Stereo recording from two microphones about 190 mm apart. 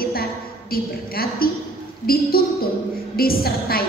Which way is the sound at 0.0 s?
50° left (ahead or behind).